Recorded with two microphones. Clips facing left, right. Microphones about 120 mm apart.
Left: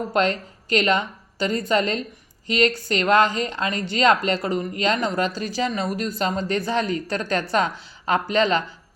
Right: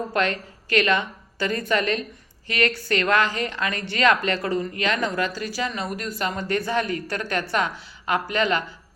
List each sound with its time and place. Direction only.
0.1 s a woman's voice: 25° left (ahead or behind)